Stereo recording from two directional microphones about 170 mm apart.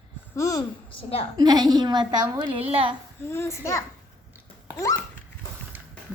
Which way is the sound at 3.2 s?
15° left (ahead or behind).